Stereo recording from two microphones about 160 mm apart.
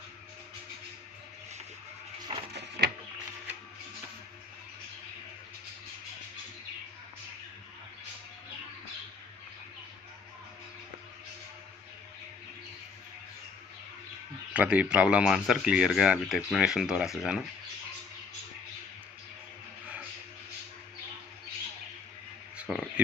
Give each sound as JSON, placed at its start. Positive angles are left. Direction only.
{"t": 2.5, "sound": "printer", "side_deg": -90}
{"t": 14.5, "sound": "speech", "side_deg": -10}
{"t": 22.7, "sound": "a sound", "side_deg": -5}